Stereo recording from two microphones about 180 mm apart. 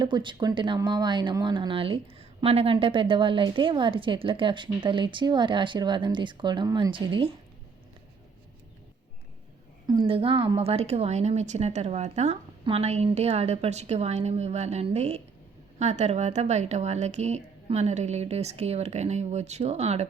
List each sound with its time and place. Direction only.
0.0 s speech: 25° right (ahead or behind)
10.1 s a woman's voice: 30° right (ahead or behind)